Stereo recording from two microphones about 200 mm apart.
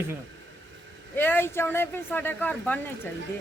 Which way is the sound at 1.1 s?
10° left (ahead or behind).